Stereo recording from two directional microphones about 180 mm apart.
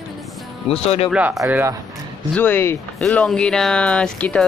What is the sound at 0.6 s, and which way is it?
Speech, 35° left (ahead or behind).